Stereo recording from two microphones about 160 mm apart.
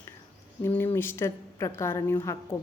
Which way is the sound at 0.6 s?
15° left (ahead or behind).